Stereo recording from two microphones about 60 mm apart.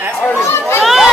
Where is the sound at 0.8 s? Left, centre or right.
Centre.